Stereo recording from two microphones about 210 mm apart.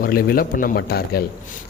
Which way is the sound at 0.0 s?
45° left (ahead or behind).